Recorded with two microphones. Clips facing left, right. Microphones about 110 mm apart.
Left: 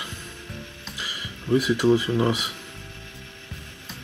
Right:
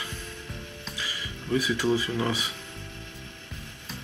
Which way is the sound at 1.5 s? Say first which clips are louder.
Left 6 dB; 20° left (ahead or behind).